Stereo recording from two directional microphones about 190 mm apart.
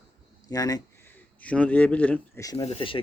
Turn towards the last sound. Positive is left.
turn(degrees=30)  # may be behind; listen again after turning